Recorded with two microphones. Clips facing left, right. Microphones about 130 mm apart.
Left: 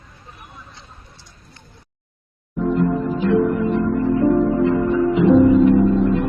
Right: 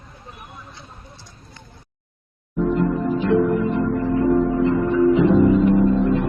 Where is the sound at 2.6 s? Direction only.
Centre (ahead or behind).